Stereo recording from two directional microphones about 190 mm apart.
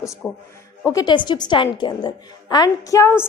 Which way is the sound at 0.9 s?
25° left (ahead or behind).